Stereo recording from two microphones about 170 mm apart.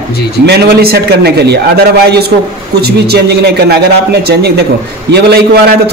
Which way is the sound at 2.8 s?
70° right (ahead or behind).